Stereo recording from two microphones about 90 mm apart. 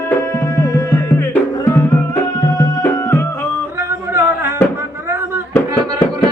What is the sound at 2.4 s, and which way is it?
Music, 40° left (ahead or behind).